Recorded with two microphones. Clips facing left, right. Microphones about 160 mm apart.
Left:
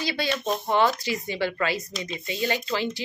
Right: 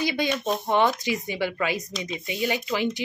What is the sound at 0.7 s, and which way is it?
Speech, 20° right (ahead or behind).